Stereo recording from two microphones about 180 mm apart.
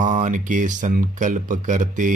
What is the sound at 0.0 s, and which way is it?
Speech, 45° right (ahead or behind).